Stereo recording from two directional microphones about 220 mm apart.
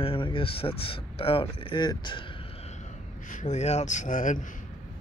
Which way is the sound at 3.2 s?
35° left (ahead or behind).